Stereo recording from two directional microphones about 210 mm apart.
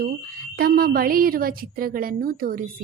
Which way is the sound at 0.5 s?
45° right (ahead or behind).